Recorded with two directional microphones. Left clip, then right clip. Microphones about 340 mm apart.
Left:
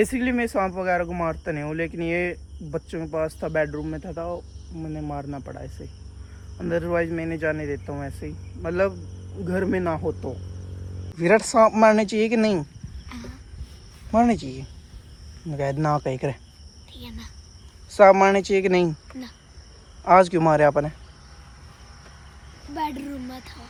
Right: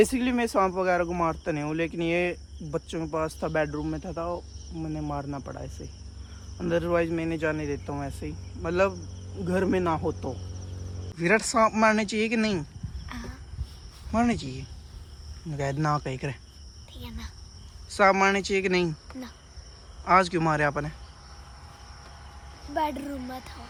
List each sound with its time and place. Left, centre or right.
0.0 s speech: centre
13.1 s a sound: centre
14.1 s speech: centre
17.9 s speech: centre
22.9 s speech: right